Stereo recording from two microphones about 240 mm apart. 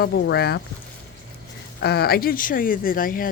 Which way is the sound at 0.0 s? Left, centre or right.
Left.